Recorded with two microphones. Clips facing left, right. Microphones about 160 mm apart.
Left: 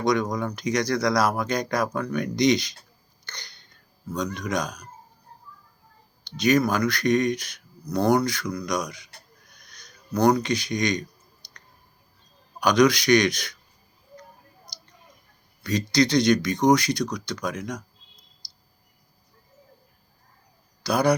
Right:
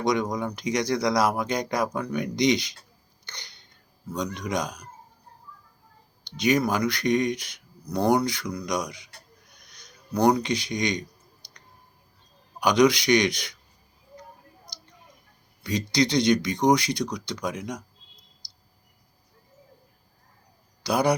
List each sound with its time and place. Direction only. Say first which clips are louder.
0.0 s speech: left 1 dB; 20° right (ahead or behind)
3.2 s a sound: left 2 dB; 20° right (ahead or behind)
4.4 s speech: left 1 dB; 20° right (ahead or behind)
6.2 s speech: left 2 dB; 20° right (ahead or behind)
12.5 s speech: left 1 dB; 20° right (ahead or behind)
15.6 s speech: left 2 dB; 20° right (ahead or behind)
20.8 s speech: left 1 dB; 20° right (ahead or behind)